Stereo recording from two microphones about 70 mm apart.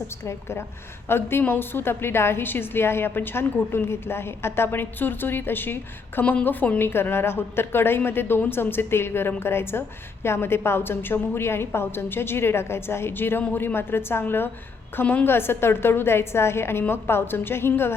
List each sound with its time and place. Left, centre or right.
1.0 s a woman's voice: left